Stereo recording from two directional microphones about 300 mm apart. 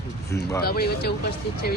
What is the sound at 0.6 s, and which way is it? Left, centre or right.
Speech, left.